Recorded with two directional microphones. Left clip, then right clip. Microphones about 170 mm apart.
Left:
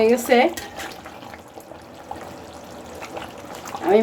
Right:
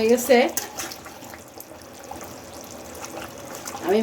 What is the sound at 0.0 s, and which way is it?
Speech, 15° left (ahead or behind).